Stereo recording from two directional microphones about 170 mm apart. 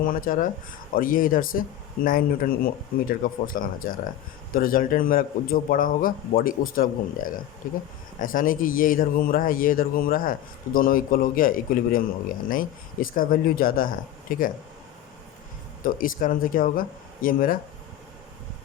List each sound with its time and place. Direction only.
0.0 s a man's voice: 55° left (ahead or behind)
15.8 s a man's voice: 55° left (ahead or behind)